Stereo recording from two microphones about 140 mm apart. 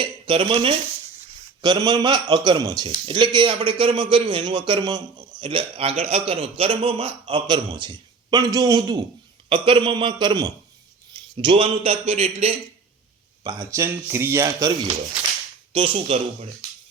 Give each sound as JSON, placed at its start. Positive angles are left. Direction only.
{"t": 0.0, "sound": "a man's voice", "side_deg": -35}
{"t": 13.4, "sound": "a man's voice", "side_deg": -25}
{"t": 15.7, "sound": "a man's voice", "side_deg": -40}